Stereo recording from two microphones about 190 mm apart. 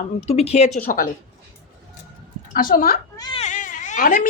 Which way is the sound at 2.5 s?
45° left (ahead or behind).